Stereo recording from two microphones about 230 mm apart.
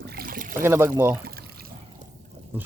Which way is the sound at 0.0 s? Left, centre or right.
Right.